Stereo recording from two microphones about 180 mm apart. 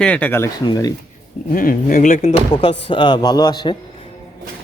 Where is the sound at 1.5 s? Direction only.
50° left (ahead or behind).